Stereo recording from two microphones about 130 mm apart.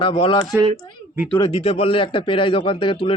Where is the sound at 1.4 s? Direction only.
50° left (ahead or behind).